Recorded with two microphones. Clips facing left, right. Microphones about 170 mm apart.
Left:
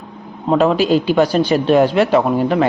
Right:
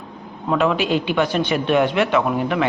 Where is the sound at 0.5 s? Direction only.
35° left (ahead or behind).